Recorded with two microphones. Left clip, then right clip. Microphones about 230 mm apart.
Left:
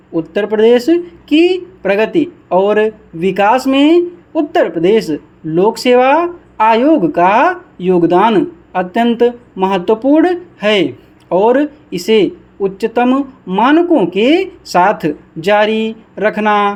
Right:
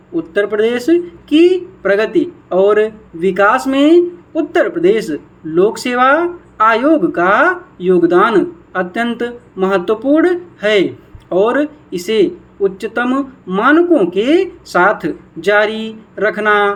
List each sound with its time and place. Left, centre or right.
0.1 s speech: left